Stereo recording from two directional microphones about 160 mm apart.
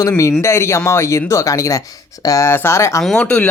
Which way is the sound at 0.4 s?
15° left (ahead or behind).